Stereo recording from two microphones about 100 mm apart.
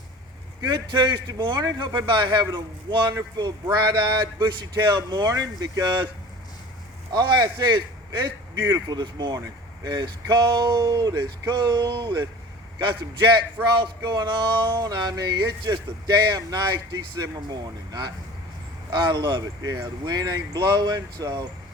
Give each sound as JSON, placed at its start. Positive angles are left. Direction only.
{"t": 0.6, "sound": "speech", "side_deg": -50}
{"t": 7.1, "sound": "speech", "side_deg": -45}